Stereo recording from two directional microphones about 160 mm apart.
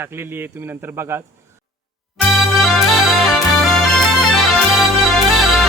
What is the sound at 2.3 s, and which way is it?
Music, centre (ahead or behind).